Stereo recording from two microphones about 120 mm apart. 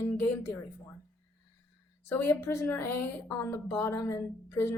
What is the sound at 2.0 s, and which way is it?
A woman's voice, 20° left (ahead or behind).